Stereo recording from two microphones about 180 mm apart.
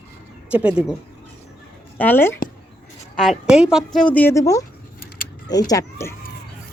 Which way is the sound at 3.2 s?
Centre (ahead or behind).